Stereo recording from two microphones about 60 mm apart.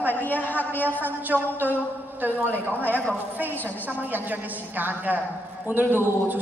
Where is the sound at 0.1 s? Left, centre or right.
Left.